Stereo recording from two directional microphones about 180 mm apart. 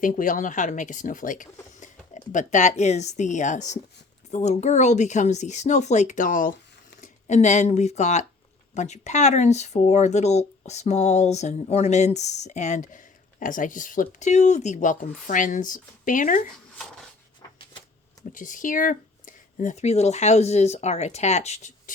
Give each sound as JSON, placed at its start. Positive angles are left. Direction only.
{"t": 0.0, "sound": "speech", "side_deg": 45}
{"t": 18.3, "sound": "speech", "side_deg": 45}